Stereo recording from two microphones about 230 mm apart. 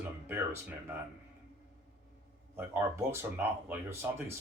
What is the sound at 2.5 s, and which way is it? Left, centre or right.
Speech, centre.